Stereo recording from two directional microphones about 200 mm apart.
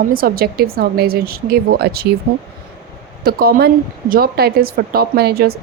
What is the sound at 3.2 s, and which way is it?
Speech, 50° right (ahead or behind).